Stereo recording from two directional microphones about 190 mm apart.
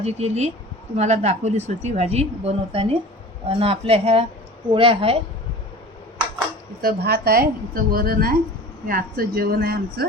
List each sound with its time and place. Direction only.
0.0 s a woman's voice: 35° right (ahead or behind)
6.8 s a woman's voice: 55° right (ahead or behind)